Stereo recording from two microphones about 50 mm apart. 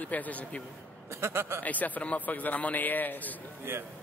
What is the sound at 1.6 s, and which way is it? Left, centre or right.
A man's voice, left.